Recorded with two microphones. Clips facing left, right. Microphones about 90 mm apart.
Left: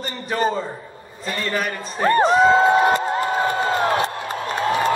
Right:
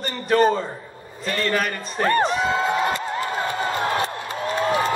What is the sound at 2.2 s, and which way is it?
Speech, 40° left (ahead or behind).